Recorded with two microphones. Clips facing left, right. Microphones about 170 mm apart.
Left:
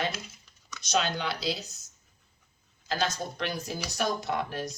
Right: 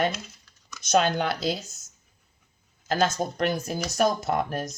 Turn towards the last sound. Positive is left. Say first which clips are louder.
# right 4 dB
turn(degrees=-45)  # may be behind; listen again after turning